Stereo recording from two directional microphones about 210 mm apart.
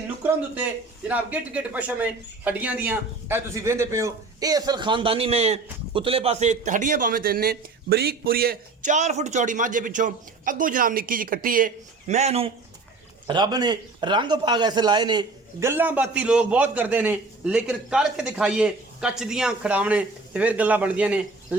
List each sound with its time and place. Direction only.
0.2 s a man's voice: 5° right (ahead or behind)